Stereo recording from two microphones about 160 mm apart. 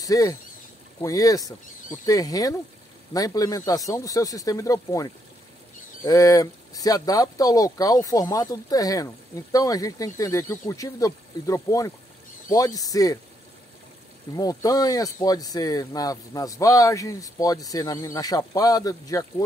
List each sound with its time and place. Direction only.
0.0 s speech: 20° left (ahead or behind)
14.3 s speech: 20° left (ahead or behind)